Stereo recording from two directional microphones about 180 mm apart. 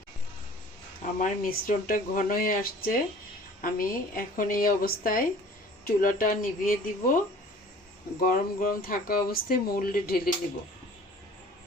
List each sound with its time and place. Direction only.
1.2 s speech: 50° left (ahead or behind)
8.2 s speech: 50° left (ahead or behind)